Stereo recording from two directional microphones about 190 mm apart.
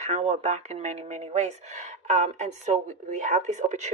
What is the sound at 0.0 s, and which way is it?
Speech, 35° right (ahead or behind).